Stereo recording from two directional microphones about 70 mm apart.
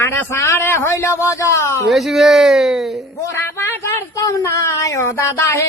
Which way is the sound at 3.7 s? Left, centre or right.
Left.